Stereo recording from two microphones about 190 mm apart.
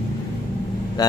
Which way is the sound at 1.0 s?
20° left (ahead or behind).